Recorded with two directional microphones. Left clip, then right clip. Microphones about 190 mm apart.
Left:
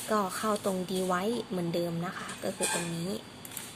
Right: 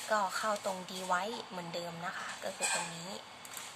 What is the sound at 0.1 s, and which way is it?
A woman's voice, 15° left (ahead or behind).